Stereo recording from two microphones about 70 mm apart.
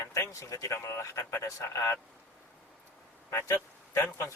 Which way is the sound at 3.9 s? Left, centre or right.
Left.